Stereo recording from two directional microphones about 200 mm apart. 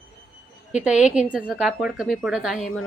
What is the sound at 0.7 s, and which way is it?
A woman's voice, 5° right (ahead or behind).